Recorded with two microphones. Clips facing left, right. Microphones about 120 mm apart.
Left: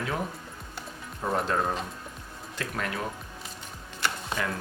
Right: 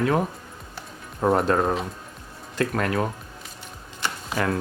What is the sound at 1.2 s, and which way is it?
Speech, 60° right (ahead or behind).